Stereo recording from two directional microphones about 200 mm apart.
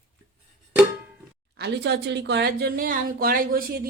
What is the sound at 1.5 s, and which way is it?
Speech, 55° right (ahead or behind).